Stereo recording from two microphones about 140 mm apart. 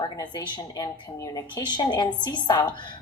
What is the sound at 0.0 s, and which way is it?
Speech, 30° left (ahead or behind).